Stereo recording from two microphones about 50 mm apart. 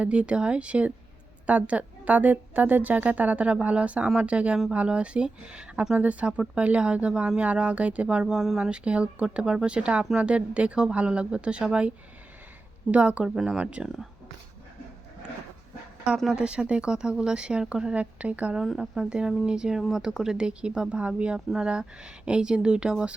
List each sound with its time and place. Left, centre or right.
0.0 s a woman's voice: right
8.2 s speech: centre
8.7 s speech: right
16.3 s speech: centre
18.8 s speech: centre
19.8 s speech: centre